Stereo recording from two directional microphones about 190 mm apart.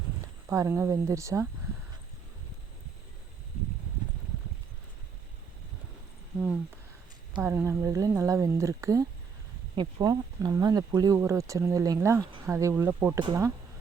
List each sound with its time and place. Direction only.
0.4 s speech: 15° right (ahead or behind)
7.3 s speech: 10° right (ahead or behind)